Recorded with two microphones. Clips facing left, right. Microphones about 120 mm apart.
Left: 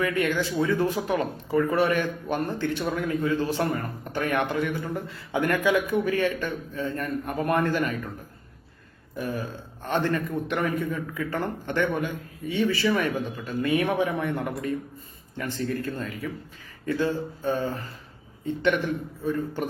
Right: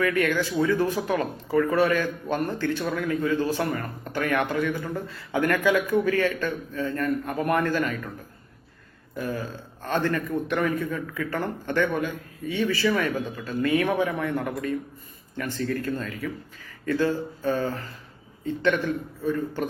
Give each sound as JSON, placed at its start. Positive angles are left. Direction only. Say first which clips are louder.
{"t": 0.0, "sound": "a man's voice", "louder": "right 1 dB", "side_deg": 20}
{"t": 9.1, "sound": "a man's voice", "louder": "even", "side_deg": 20}